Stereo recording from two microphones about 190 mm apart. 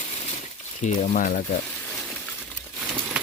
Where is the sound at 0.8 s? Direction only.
45° left (ahead or behind).